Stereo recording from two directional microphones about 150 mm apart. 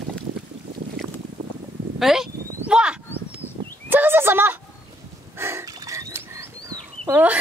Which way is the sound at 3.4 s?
45° right (ahead or behind).